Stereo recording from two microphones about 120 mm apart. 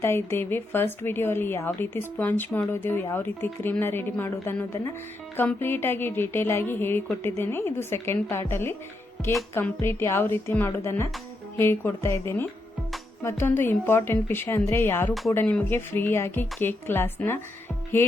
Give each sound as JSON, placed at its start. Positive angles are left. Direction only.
{"t": 0.0, "sound": "a woman's voice", "side_deg": 20}